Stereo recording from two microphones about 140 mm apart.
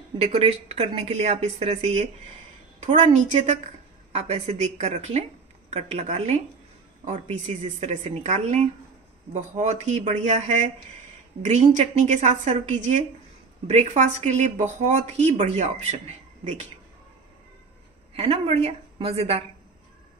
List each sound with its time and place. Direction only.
0.2 s speech: 45° right (ahead or behind)
7.4 s speech: 60° right (ahead or behind)
18.1 s speech: 45° right (ahead or behind)